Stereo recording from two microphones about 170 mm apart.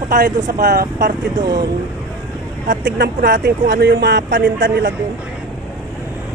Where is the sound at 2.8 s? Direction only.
60° right (ahead or behind).